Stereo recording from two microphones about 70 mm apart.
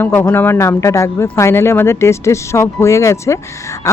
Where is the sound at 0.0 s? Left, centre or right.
Left.